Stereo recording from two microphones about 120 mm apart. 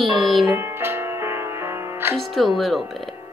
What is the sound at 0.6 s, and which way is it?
Music, 20° right (ahead or behind).